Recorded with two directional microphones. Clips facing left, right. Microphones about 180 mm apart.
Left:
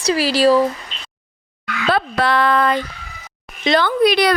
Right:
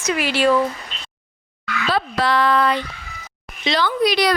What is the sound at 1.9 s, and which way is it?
Speech, 55° left (ahead or behind).